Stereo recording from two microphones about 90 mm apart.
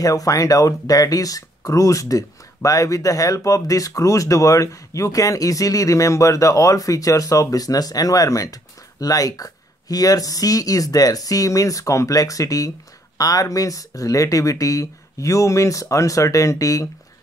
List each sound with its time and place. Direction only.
0.0 s speech: 40° left (ahead or behind)